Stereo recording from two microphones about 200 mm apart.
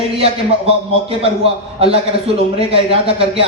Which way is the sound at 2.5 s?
30° right (ahead or behind).